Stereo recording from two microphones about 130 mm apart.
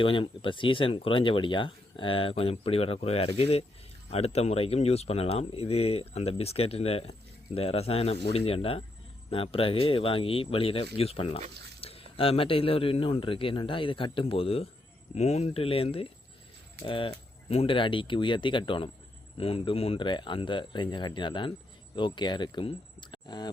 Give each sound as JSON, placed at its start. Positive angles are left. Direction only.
{"t": 0.0, "sound": "speech", "side_deg": 40}
{"t": 15.1, "sound": "speech", "side_deg": 55}